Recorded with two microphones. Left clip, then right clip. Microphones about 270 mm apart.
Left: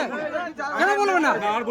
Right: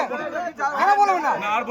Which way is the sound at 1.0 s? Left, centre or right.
Left.